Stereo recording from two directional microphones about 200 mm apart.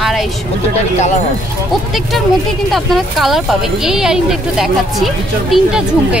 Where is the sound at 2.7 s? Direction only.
Centre (ahead or behind).